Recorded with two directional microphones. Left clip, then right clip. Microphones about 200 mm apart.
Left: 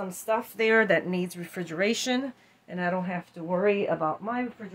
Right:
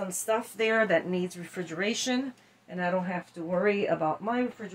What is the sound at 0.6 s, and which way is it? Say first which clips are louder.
Speech: left 3 dB; 45° left (ahead or behind).